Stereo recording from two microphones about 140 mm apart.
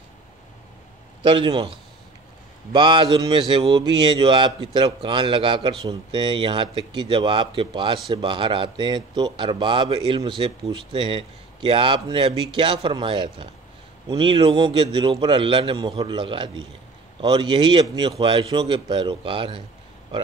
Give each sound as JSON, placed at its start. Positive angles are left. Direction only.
{"t": 1.2, "sound": "speech", "side_deg": -35}
{"t": 2.7, "sound": "speech", "side_deg": -35}